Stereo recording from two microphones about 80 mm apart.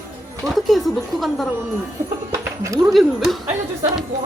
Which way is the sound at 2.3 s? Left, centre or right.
Right.